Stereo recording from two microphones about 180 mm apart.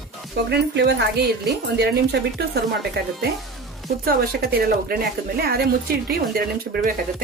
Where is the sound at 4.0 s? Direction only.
60° right (ahead or behind).